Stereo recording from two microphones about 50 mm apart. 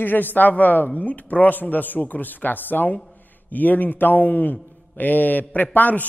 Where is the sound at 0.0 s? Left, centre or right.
Left.